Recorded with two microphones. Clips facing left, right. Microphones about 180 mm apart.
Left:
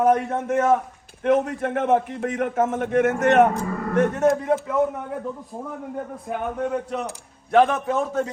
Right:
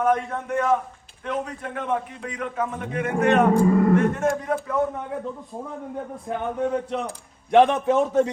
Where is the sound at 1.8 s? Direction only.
50° left (ahead or behind).